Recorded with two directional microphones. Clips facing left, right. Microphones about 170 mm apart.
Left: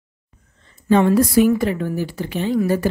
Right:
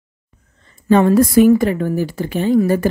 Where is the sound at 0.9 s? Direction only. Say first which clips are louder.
Right 3 dB; 50° right (ahead or behind).